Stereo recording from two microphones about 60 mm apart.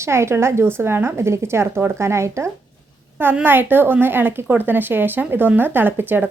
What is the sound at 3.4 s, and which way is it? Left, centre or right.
A woman's voice, right.